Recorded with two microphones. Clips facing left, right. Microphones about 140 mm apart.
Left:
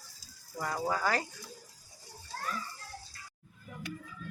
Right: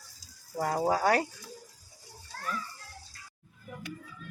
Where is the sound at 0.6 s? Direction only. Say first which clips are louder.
Right 6 dB; 45° right (ahead or behind).